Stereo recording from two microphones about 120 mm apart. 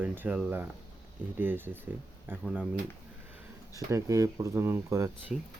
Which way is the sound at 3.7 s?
25° right (ahead or behind).